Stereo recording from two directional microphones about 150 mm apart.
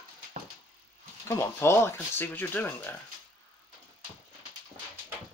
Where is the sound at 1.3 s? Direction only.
20° left (ahead or behind).